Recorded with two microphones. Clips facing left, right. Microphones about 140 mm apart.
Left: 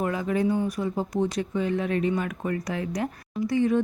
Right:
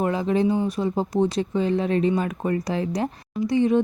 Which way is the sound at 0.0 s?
25° right (ahead or behind).